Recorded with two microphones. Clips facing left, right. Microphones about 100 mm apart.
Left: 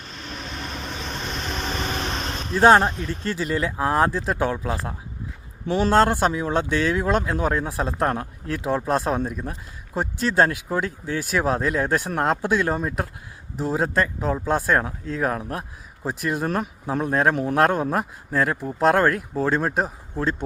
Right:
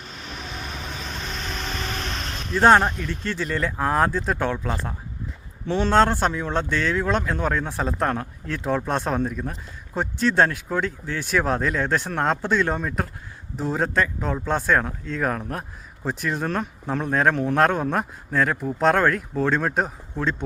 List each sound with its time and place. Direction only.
0.1 s vehicle: 5° right (ahead or behind)
1.8 s vehicle: 20° left (ahead or behind)
2.6 s a man's voice: 5° left (ahead or behind)